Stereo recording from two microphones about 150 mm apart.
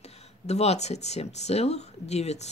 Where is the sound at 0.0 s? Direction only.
45° left (ahead or behind).